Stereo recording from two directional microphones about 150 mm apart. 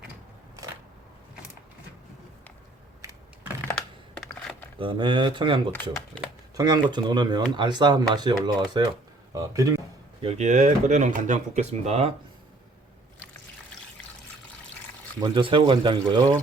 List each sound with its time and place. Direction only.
3.0 s a sound: 20° right (ahead or behind)
3.8 s computer keyboard: 5° left (ahead or behind)
4.8 s speech: 35° right (ahead or behind)
6.6 s speech: 30° right (ahead or behind)
10.2 s speech: 45° right (ahead or behind)
15.2 s speech: 35° right (ahead or behind)